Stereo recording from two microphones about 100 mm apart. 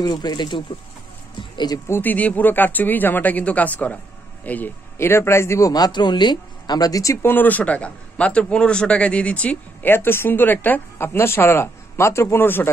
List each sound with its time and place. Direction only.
0.0 s speech: 45° left (ahead or behind)
1.9 s a man's voice: 20° left (ahead or behind)
5.7 s speech: 45° left (ahead or behind)
7.2 s a man's voice: 20° left (ahead or behind)